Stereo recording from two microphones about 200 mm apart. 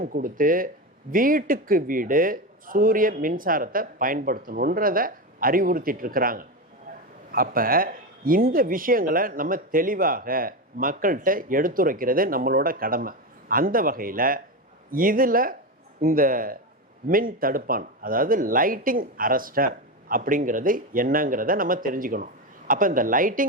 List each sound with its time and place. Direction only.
0.0 s speech: 45° right (ahead or behind)